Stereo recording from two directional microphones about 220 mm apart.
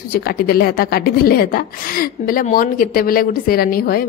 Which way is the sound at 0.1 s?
45° left (ahead or behind).